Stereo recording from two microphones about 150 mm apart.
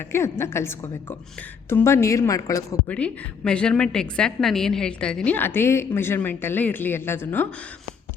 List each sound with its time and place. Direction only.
0.1 s a woman's voice: 15° left (ahead or behind)
2.8 s a woman's voice: 10° left (ahead or behind)